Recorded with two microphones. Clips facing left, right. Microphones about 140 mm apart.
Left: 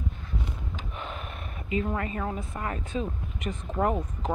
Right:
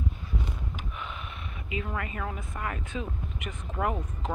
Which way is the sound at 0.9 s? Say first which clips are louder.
Left 2 dB; 40° left (ahead or behind).